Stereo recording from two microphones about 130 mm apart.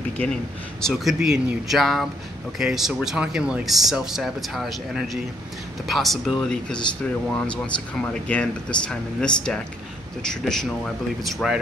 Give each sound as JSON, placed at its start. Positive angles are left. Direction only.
{"t": 0.7, "sound": "speech", "side_deg": 0}